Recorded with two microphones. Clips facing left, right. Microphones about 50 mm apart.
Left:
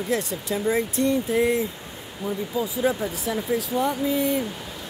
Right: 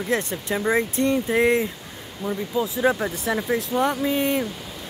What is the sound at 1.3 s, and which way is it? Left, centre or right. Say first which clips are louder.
Speech: right 2 dB; right.